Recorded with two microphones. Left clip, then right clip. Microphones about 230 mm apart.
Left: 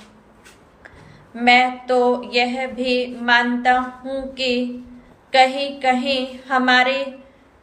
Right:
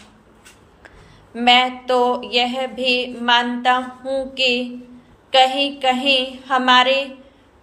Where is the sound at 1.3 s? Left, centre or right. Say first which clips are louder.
Even; centre.